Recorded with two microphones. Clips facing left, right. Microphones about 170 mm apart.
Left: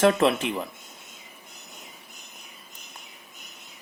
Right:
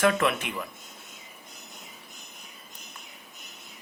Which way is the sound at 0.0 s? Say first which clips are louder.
Left 4 dB; 30° left (ahead or behind).